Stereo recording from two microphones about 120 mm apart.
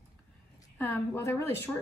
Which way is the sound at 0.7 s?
15° left (ahead or behind).